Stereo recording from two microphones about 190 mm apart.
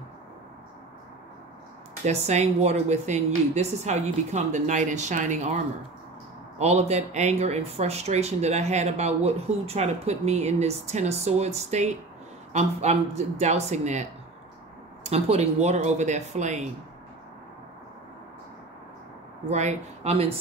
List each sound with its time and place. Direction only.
2.0 s speech: 35° right (ahead or behind)
6.6 s speech: 35° right (ahead or behind)
15.0 s speech: 35° right (ahead or behind)
19.5 s speech: 35° right (ahead or behind)